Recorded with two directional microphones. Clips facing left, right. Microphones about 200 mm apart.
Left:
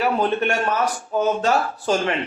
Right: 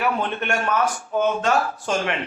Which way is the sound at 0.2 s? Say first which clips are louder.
Left 4 dB; 35° left (ahead or behind).